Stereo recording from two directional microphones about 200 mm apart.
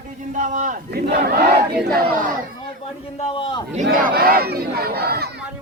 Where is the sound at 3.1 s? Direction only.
25° left (ahead or behind).